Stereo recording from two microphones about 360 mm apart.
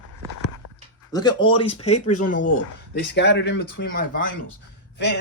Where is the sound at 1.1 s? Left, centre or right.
Centre.